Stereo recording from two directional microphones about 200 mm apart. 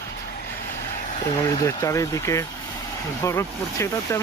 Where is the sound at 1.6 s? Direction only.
15° left (ahead or behind).